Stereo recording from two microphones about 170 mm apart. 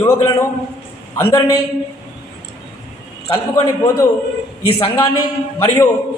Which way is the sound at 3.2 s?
20° left (ahead or behind).